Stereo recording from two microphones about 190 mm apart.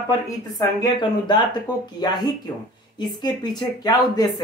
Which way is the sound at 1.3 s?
25° left (ahead or behind).